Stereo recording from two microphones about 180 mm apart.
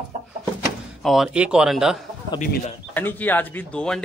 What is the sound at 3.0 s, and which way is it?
Speech, 10° left (ahead or behind).